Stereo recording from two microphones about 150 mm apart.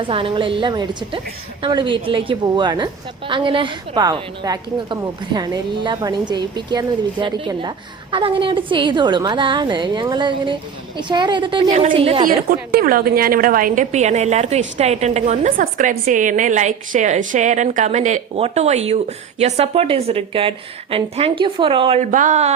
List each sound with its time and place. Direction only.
0.0 s a woman's voice: 35° right (ahead or behind)
11.7 s a woman's voice: 50° right (ahead or behind)
11.9 s a woman's voice: 35° right (ahead or behind)
12.7 s a woman's voice: 75° right (ahead or behind); by 15.5 s 50° right (ahead or behind)
15.5 s a woman's voice: 65° right (ahead or behind); by 22.0 s 35° right (ahead or behind)
22.1 s a woman's voice: 55° right (ahead or behind)